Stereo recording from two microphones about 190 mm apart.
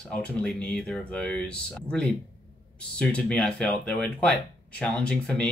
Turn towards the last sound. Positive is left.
turn(degrees=5)  # may be behind; listen again after turning